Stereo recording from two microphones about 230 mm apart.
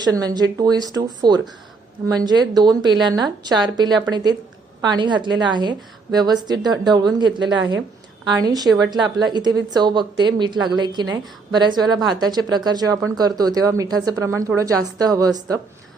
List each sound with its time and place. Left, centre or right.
0.0 s a woman's voice: centre